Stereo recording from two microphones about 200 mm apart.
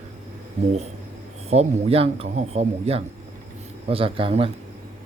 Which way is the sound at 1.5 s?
30° right (ahead or behind).